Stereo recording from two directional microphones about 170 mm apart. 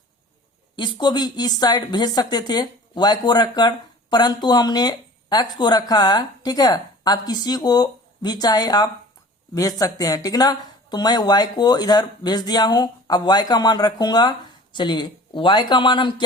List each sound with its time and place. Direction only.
0.8 s speech: 25° left (ahead or behind)